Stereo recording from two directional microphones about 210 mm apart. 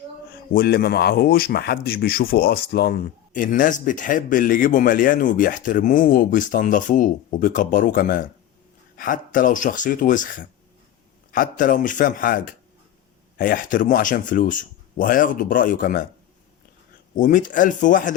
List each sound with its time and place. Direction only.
0.3 s a man's voice: 45° left (ahead or behind)
17.2 s a man's voice: 40° left (ahead or behind)